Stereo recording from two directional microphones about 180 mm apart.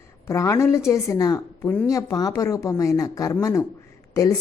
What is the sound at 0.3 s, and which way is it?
A woman's voice, 15° left (ahead or behind).